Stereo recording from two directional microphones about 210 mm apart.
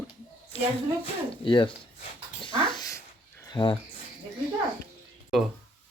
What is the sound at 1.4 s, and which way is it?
Speech, 25° left (ahead or behind).